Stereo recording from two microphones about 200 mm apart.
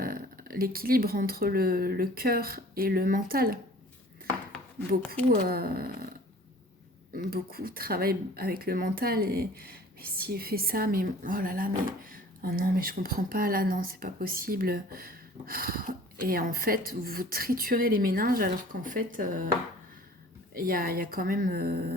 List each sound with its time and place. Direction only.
0.0 s speech: 45° right (ahead or behind)
5.3 s speech: 45° right (ahead or behind)
7.1 s speech: 45° right (ahead or behind)
20.5 s speech: 45° right (ahead or behind)